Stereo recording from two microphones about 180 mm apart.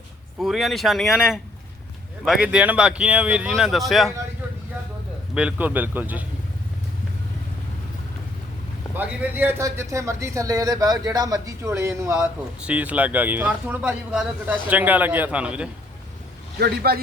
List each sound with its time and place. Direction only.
0.3 s speech: centre (ahead or behind)
5.3 s a man's voice: 5° right (ahead or behind)
9.0 s a man's voice: 10° right (ahead or behind)
16.6 s speech: 60° right (ahead or behind)